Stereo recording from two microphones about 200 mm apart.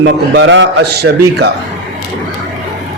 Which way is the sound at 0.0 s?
60° right (ahead or behind).